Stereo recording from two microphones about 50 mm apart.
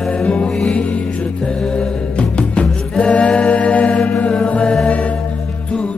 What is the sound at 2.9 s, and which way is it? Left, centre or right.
Choir, left.